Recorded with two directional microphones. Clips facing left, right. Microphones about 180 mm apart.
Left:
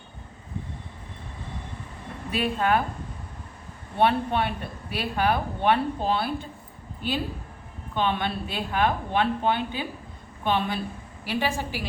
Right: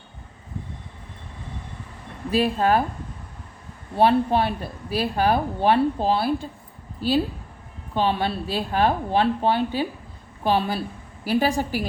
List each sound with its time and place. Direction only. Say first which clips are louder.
2.3 s speech: right 4 dB; 35° right (ahead or behind)
3.9 s speech: right 4 dB; 35° right (ahead or behind)
7.9 s a woman's voice: right 3 dB; 35° right (ahead or behind)